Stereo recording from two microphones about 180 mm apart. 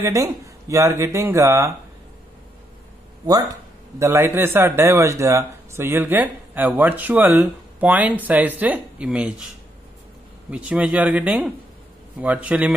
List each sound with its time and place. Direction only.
0.0 s speech: 15° right (ahead or behind)
3.3 s speech: 20° right (ahead or behind)
10.5 s speech: 5° right (ahead or behind)